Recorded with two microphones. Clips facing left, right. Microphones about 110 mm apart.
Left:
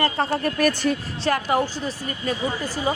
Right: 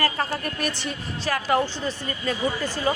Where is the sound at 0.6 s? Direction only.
45° left (ahead or behind).